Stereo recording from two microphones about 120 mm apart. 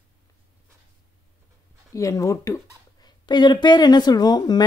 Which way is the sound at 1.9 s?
25° left (ahead or behind).